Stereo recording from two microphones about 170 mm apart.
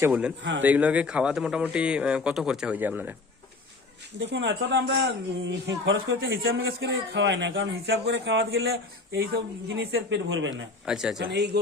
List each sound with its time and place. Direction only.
0.0 s a man's voice: 5° right (ahead or behind)
4.2 s speech: 90° right
10.5 s speech: 5° right (ahead or behind)
11.2 s speech: 80° right